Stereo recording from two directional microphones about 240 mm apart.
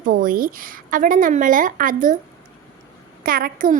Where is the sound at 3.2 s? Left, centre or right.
Right.